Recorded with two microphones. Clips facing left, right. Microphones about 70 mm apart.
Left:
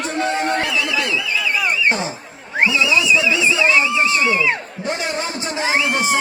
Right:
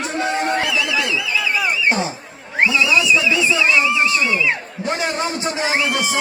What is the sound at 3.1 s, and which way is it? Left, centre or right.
Music, left.